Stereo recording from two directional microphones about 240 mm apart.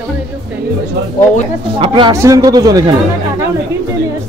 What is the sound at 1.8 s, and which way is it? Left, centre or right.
Speech, centre.